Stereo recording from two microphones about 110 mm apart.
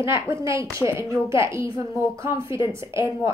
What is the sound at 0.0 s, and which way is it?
A woman's voice, 20° right (ahead or behind).